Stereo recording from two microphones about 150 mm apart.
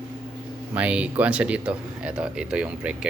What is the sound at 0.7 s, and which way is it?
Speech, 10° right (ahead or behind).